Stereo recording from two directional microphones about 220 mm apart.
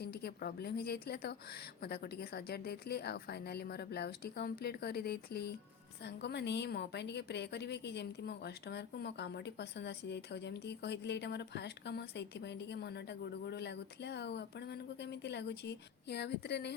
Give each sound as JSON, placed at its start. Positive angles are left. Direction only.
{"t": 0.0, "sound": "a woman's voice", "side_deg": 45}